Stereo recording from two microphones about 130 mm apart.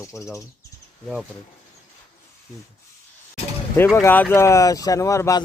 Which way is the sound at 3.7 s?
20° left (ahead or behind).